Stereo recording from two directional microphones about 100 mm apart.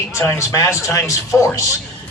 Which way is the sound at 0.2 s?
30° left (ahead or behind).